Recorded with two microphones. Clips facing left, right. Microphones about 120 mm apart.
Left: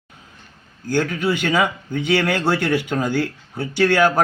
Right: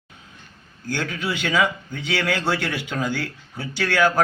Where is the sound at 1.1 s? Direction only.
50° left (ahead or behind).